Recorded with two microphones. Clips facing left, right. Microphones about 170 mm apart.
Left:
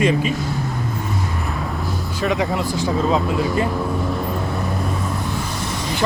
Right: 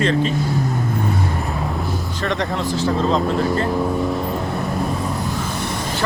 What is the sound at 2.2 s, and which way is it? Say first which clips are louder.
Speech: left 2 dB; 5° left (ahead or behind).